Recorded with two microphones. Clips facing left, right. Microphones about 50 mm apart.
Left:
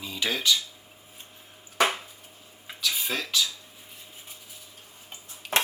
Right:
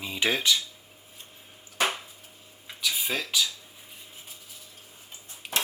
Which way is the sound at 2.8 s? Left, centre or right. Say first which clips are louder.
Even; centre.